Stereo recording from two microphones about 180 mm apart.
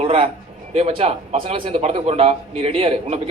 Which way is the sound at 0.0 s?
30° right (ahead or behind).